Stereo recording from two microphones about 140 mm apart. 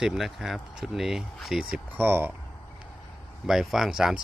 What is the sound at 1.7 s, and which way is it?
Speech, 15° right (ahead or behind).